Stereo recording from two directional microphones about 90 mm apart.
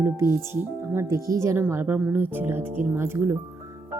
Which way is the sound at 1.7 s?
20° right (ahead or behind).